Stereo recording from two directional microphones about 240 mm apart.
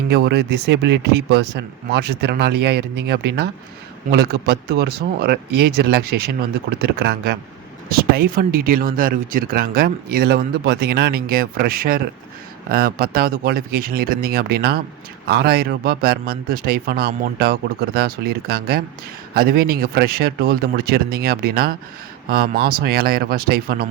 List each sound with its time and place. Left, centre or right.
0.1 s speech: right